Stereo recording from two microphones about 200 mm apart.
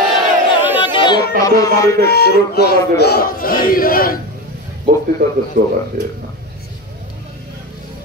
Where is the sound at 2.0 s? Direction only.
55° left (ahead or behind).